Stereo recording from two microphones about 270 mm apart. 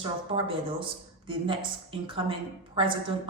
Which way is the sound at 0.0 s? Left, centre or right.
Centre.